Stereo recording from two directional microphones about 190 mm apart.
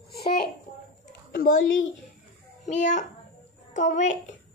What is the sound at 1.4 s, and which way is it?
Speech, 90° left.